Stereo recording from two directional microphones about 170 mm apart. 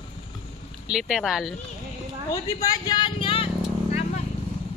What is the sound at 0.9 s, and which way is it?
Speech, centre (ahead or behind).